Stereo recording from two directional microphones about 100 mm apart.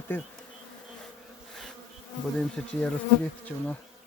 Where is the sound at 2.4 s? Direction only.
5° left (ahead or behind).